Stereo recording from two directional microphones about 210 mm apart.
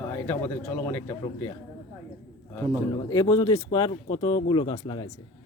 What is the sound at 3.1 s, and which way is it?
Speech, 15° left (ahead or behind).